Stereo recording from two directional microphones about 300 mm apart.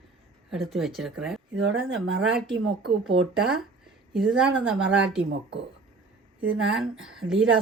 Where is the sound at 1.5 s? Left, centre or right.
Right.